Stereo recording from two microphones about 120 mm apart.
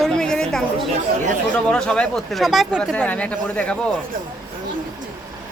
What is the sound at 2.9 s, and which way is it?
Speech, 10° left (ahead or behind).